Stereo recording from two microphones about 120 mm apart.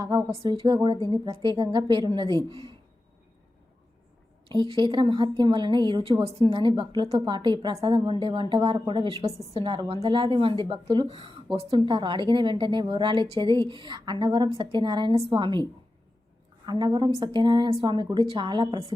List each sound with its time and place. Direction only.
0.0 s speech: 35° right (ahead or behind)
4.4 s a woman's voice: 40° right (ahead or behind)
9.2 s a woman's voice: 55° right (ahead or behind); by 15.6 s 40° right (ahead or behind)
16.6 s speech: 35° right (ahead or behind)